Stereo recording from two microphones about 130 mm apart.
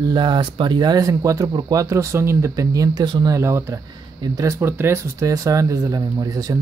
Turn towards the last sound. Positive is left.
turn(degrees=-30)  # may be behind; listen again after turning